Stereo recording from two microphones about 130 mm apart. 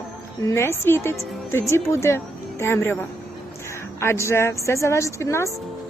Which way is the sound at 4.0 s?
20° left (ahead or behind).